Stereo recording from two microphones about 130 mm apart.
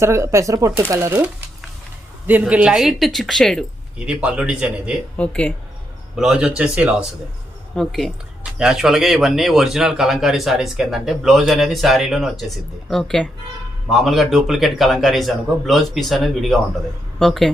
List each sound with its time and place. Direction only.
0.0 s speech: 20° right (ahead or behind); by 3.6 s 5° left (ahead or behind)
3.9 s speech: 10° right (ahead or behind)
5.1 s speech: 10° left (ahead or behind)
6.1 s speech: 5° right (ahead or behind)
7.8 s speech: centre (ahead or behind)